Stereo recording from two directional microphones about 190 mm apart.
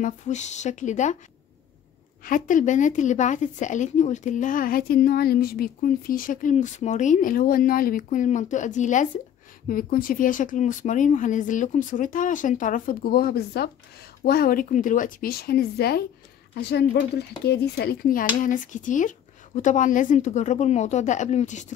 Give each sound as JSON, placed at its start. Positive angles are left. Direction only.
{"t": 0.0, "sound": "speech", "side_deg": 40}
{"t": 2.2, "sound": "a woman's voice", "side_deg": 45}